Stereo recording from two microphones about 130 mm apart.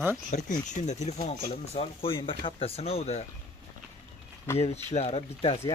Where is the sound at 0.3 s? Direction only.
70° left (ahead or behind); by 3.3 s 50° left (ahead or behind).